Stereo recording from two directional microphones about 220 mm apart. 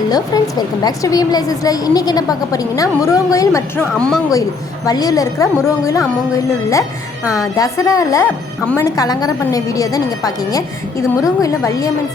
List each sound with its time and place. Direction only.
0.1 s a woman's voice: 15° left (ahead or behind)
4.9 s a woman's voice: 15° left (ahead or behind)